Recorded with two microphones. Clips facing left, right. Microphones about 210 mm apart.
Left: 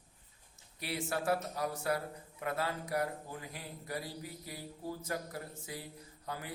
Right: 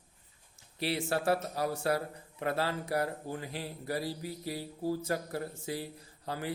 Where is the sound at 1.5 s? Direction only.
30° right (ahead or behind).